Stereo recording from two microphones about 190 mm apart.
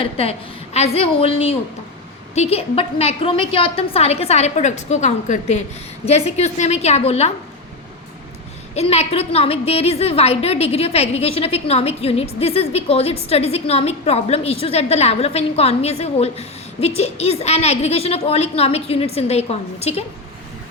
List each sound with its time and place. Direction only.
0.0 s a woman's voice: 30° left (ahead or behind)
8.7 s a woman's voice: 35° left (ahead or behind)